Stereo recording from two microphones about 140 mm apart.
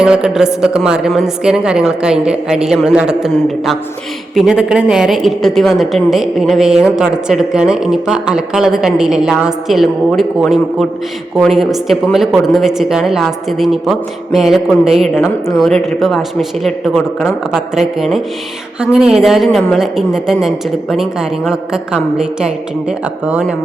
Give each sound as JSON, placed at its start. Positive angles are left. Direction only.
{"t": 0.0, "sound": "a woman's voice", "side_deg": -5}
{"t": 11.3, "sound": "a woman's voice", "side_deg": 0}
{"t": 15.1, "sound": "a woman's voice", "side_deg": 20}
{"t": 15.5, "sound": "a woman's voice", "side_deg": 0}